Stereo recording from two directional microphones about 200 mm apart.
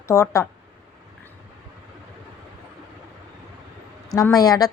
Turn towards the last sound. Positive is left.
turn(degrees=20)  # may be behind; listen again after turning